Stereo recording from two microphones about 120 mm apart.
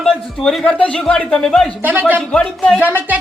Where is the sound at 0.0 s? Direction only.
5° left (ahead or behind).